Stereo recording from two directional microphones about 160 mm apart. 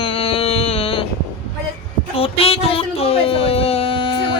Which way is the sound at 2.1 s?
35° left (ahead or behind).